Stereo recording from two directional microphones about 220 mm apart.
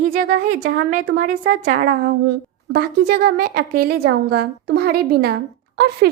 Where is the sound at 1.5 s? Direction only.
35° right (ahead or behind).